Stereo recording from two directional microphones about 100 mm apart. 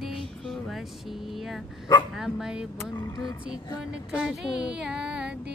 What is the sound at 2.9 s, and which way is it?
Speech, 45° left (ahead or behind).